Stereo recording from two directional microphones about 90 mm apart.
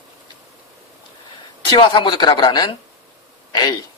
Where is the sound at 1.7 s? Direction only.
65° left (ahead or behind).